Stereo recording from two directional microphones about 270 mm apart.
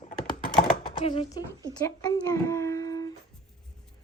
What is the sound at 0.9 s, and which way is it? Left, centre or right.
A child's voice, left.